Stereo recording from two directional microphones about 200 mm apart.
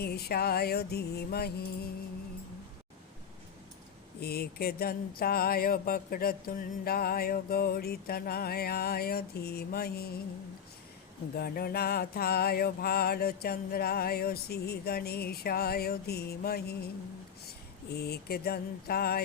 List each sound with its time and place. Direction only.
0.0 s speech: 50° left (ahead or behind)
4.2 s speech: 50° left (ahead or behind)
11.3 s speech: 50° left (ahead or behind)
17.9 s speech: 50° left (ahead or behind)